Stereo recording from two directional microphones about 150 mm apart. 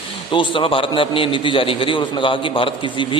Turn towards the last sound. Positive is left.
turn(degrees=30)  # may be behind; listen again after turning